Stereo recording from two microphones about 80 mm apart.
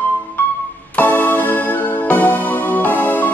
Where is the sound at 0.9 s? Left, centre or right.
Left.